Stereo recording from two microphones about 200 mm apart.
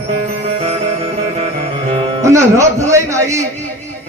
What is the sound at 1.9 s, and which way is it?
Speech, 25° right (ahead or behind).